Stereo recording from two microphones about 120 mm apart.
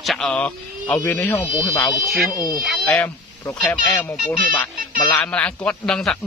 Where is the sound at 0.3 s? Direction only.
10° left (ahead or behind).